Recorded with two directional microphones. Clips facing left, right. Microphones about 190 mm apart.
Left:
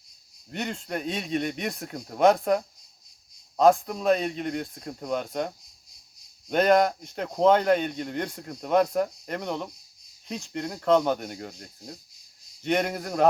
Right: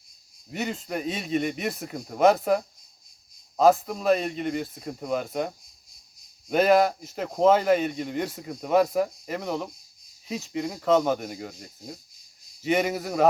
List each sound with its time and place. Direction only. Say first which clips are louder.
0.5 s speech: right 1 dB; 5° right (ahead or behind)
6.5 s speech: right 1 dB; 5° right (ahead or behind)